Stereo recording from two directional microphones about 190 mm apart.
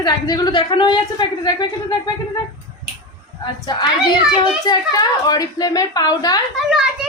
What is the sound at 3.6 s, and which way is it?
A woman's voice, 25° left (ahead or behind).